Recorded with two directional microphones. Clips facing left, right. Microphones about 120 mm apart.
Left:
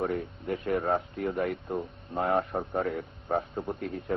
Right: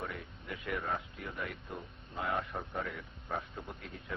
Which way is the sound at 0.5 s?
30° left (ahead or behind).